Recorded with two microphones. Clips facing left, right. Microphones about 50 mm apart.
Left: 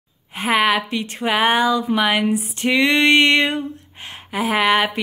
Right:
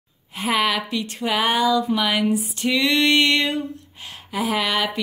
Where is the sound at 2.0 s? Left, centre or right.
Left.